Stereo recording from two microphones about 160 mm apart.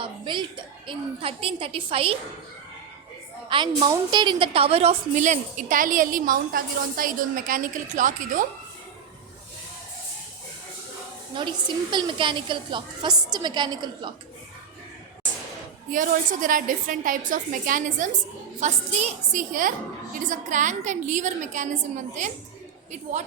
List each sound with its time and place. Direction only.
0.0 s a woman's voice: 30° right (ahead or behind)
3.8 s a woman's voice: 25° right (ahead or behind); by 8.4 s 55° right (ahead or behind)
11.3 s a woman's voice: 30° right (ahead or behind)
15.9 s a woman's voice: 55° right (ahead or behind)